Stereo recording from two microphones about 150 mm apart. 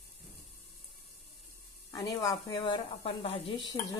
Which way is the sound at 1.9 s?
25° left (ahead or behind).